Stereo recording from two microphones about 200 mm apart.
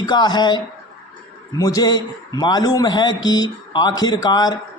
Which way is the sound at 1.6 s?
20° left (ahead or behind).